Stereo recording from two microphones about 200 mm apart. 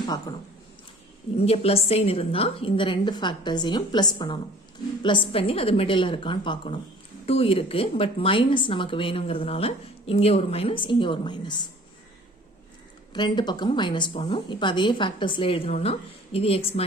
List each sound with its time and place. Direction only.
1.4 s a woman's voice: 30° left (ahead or behind)
13.1 s a woman's voice: 20° left (ahead or behind)